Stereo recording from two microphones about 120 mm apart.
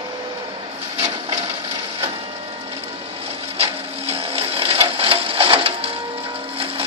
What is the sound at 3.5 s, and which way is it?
Printer, 55° right (ahead or behind).